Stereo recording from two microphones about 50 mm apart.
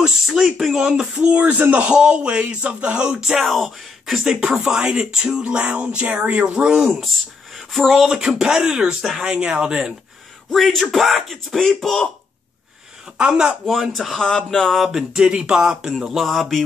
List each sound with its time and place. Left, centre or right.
0.6 s speech: centre
1.1 s music: right
1.9 s music: centre
3.3 s speech: centre
4.2 s speech: centre
4.6 s music: centre
6.2 s speech: right; by 8.1 s centre
8.1 s speech: centre
10.5 s speech: centre
13.2 s speech: centre
13.7 s speech: centre
14.1 s speech: centre
14.7 s speech: centre
15.4 s speech: centre